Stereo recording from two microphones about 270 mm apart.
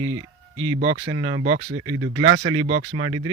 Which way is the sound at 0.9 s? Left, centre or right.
Right.